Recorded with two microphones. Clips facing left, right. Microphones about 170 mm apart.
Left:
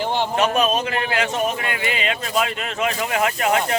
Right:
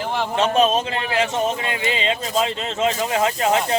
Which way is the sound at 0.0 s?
30° left (ahead or behind).